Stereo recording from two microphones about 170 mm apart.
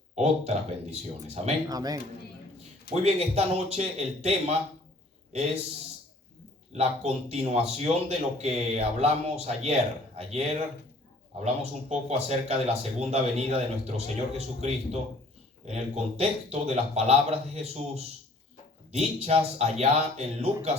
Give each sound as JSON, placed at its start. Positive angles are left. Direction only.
{"t": 0.2, "sound": "speech", "side_deg": -40}
{"t": 1.6, "sound": "speech", "side_deg": -20}
{"t": 2.9, "sound": "speech", "side_deg": -40}
{"t": 6.7, "sound": "speech", "side_deg": -40}